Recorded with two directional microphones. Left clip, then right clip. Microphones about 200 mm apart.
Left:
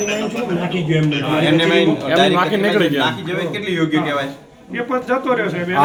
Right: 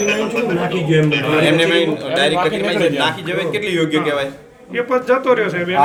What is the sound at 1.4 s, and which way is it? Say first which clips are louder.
A man's voice: left 2 dB; 20° right (ahead or behind).